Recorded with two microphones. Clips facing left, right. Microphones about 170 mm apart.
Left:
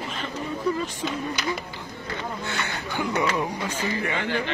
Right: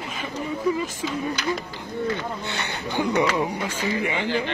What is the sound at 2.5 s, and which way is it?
Speech, 20° right (ahead or behind).